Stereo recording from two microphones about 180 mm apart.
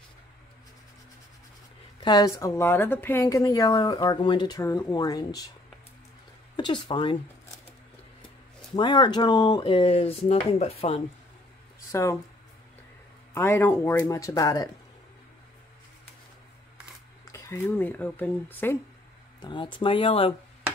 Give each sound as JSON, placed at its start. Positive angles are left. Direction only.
{"t": 2.0, "sound": "a woman's voice", "side_deg": 20}
{"t": 6.5, "sound": "speech", "side_deg": 25}
{"t": 8.7, "sound": "speech", "side_deg": 25}
{"t": 11.9, "sound": "speech", "side_deg": 15}
{"t": 13.3, "sound": "speech", "side_deg": 15}
{"t": 17.2, "sound": "speech", "side_deg": 15}
{"t": 19.4, "sound": "a woman's voice", "side_deg": 25}